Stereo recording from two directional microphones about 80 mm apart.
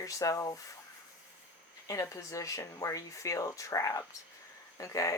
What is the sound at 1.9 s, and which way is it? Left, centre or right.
Speech, left.